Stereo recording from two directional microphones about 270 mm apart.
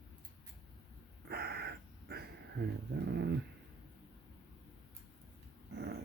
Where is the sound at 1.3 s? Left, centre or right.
Right.